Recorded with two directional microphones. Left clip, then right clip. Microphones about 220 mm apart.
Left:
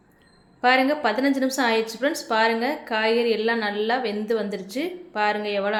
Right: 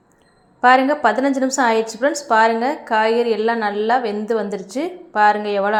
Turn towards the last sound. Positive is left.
turn(degrees=-15)  # may be behind; listen again after turning